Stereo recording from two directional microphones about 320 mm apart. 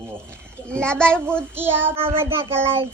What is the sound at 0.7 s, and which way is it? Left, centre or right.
Child singing, centre.